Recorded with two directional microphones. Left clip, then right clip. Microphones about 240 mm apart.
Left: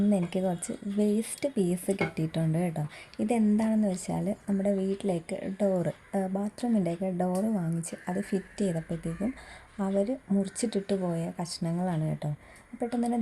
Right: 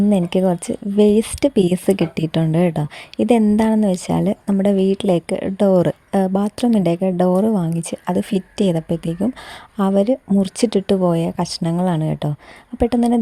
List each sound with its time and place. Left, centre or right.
0.1 s speech: right